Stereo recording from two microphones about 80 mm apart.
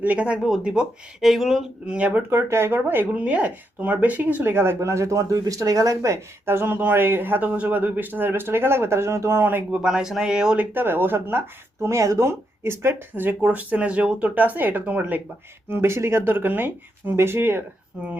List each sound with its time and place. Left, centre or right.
0.0 s speech: centre
0.4 s speech: centre
2.0 s speech: centre
2.3 s speech: right
9.7 s speech: centre
10.8 s speech: right
15.7 s speech: right